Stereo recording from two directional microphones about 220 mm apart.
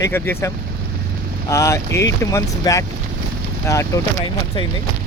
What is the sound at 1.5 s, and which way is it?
Speech, 15° left (ahead or behind).